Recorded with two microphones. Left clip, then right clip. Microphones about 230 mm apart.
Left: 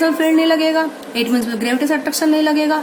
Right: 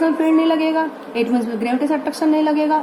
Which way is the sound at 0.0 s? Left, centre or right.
Left.